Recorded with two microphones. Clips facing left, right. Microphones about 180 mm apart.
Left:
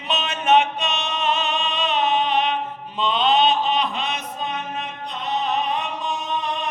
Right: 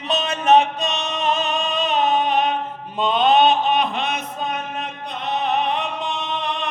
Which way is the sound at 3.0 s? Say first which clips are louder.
Right 3 dB; 50° right (ahead or behind).